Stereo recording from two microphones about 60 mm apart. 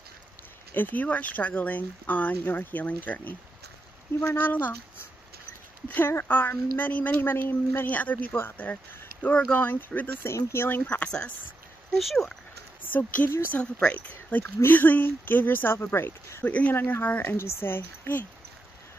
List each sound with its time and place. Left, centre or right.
0.7 s speech: left
4.4 s speech: left
5.9 s speech: left
7.2 s speech: left
10.2 s speech: left
10.8 s speech: left
12.0 s speech: centre
12.8 s speech: left
13.7 s speech: left
14.3 s speech: left
15.8 s speech: left
16.4 s speech: left
16.7 s speech: left